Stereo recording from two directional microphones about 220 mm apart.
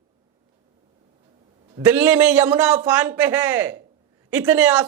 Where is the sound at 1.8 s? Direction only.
5° right (ahead or behind).